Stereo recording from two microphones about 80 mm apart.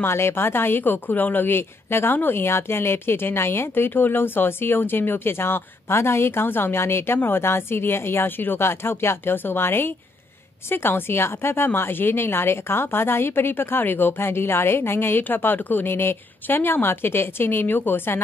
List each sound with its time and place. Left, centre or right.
0.0 s speech: left